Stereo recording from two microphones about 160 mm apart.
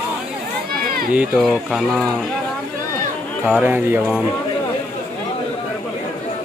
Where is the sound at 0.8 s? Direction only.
65° right (ahead or behind).